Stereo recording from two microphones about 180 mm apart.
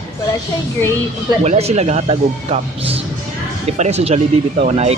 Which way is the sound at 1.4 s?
35° right (ahead or behind).